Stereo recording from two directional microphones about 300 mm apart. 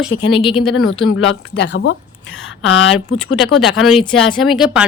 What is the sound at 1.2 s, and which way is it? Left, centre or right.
Speech, left.